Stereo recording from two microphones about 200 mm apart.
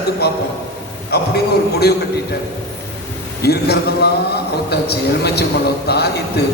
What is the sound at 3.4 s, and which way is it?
A man's voice, 55° left (ahead or behind).